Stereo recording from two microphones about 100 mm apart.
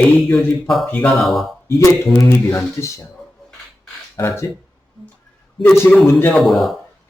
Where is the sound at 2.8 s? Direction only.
25° left (ahead or behind).